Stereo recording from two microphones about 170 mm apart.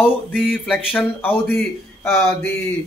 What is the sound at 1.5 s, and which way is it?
Speech, 10° left (ahead or behind).